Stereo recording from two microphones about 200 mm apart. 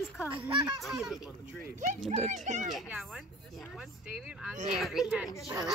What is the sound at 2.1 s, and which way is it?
Speech, 35° right (ahead or behind).